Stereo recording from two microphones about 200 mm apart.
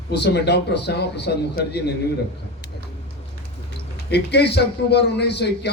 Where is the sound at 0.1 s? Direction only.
55° left (ahead or behind).